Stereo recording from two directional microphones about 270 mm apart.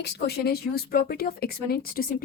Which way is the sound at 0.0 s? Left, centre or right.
Left.